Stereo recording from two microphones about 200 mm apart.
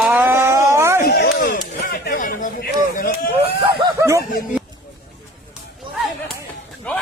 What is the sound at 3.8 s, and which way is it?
Speech, 15° right (ahead or behind).